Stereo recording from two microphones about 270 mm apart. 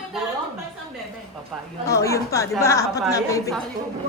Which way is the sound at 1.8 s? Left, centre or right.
Centre.